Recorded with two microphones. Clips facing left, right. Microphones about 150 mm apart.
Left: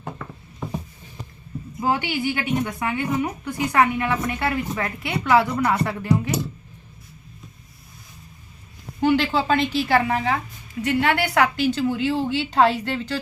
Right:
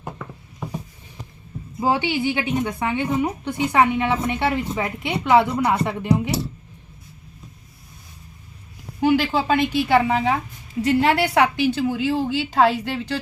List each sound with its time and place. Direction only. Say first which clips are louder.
0.6 s a sound: left 1 dB; 10° right (ahead or behind)
1.8 s a woman's voice: right 2 dB; 25° right (ahead or behind)
9.0 s a woman's voice: right 1 dB; 10° right (ahead or behind)
10.8 s a woman's voice: right 3 dB; 30° right (ahead or behind)
11.3 s a woman's voice: right 1 dB; 15° right (ahead or behind)